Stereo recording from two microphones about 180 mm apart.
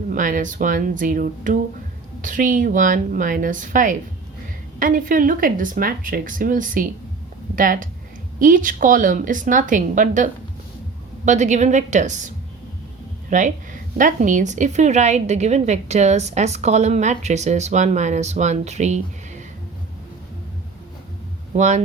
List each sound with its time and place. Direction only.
0.1 s speech: 50° right (ahead or behind)
11.3 s a woman's voice: 40° right (ahead or behind)
13.3 s a woman's voice: 45° right (ahead or behind)
21.5 s speech: 40° right (ahead or behind)